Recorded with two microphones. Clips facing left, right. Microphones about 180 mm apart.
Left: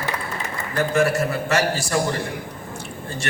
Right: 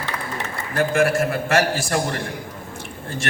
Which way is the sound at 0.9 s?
50° right (ahead or behind).